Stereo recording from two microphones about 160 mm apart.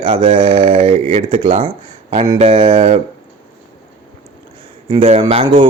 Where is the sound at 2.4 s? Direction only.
35° right (ahead or behind).